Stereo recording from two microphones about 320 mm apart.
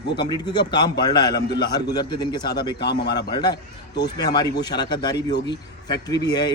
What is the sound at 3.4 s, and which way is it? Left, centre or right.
A man's voice, centre.